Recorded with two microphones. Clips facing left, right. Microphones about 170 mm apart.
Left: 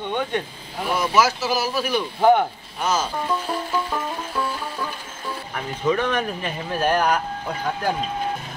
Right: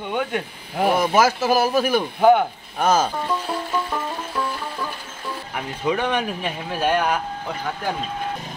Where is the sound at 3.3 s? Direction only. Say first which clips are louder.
Even; centre (ahead or behind).